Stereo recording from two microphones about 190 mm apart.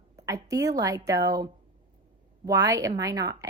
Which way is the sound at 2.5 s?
20° right (ahead or behind).